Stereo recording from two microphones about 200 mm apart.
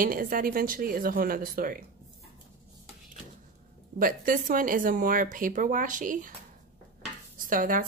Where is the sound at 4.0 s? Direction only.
45° right (ahead or behind).